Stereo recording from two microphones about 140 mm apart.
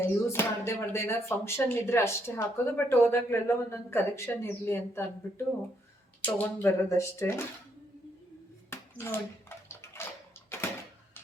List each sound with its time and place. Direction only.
0.0 s speech: 15° left (ahead or behind)
8.7 s bathtub: 15° left (ahead or behind)
10.5 s a sound: 15° left (ahead or behind)